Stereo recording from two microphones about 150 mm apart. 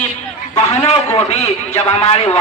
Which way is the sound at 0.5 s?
45° left (ahead or behind).